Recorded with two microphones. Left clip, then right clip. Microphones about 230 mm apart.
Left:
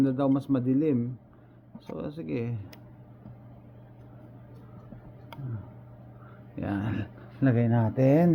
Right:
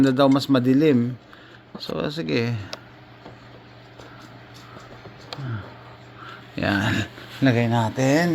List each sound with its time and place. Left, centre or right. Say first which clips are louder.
0.0 s speech: right 8 dB; right
2.0 s speech: right 9 dB; right
6.6 s speech: right 11 dB; right
7.4 s speech: right 6 dB; centre
7.7 s speech: right 6 dB; centre
7.9 s speech: right 1 dB; centre